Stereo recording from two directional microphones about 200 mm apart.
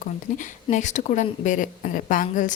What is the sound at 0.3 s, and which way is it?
A woman's voice, 40° left (ahead or behind).